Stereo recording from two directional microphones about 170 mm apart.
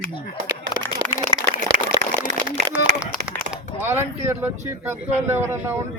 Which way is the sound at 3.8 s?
15° right (ahead or behind).